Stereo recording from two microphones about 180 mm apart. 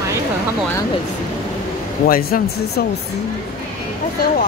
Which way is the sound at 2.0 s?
55° left (ahead or behind).